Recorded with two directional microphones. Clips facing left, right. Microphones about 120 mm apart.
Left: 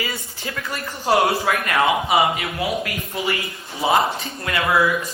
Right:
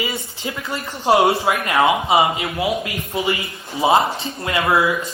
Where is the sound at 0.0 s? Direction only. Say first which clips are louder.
Right 3 dB; 20° right (ahead or behind).